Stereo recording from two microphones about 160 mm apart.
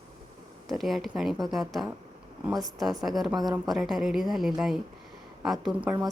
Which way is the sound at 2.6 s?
20° right (ahead or behind).